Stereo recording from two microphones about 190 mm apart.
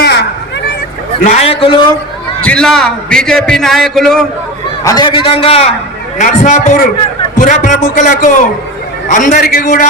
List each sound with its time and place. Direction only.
0.0 s a sound: 60° left (ahead or behind)
1.2 s a man's voice: 35° left (ahead or behind)
2.4 s a man's voice: 5° left (ahead or behind)
4.8 s a man's voice: 20° left (ahead or behind); by 9.8 s 50° left (ahead or behind)